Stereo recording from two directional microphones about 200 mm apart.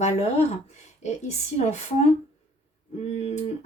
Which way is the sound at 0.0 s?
30° left (ahead or behind).